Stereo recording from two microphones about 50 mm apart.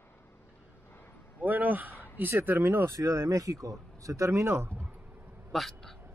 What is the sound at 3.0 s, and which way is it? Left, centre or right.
Speech, right.